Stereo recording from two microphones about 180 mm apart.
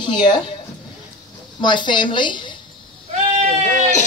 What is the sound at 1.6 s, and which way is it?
Speech, 25° left (ahead or behind).